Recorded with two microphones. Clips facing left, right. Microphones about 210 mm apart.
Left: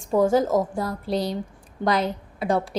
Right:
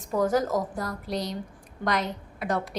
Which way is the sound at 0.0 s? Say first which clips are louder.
Left 5 dB; 30° left (ahead or behind).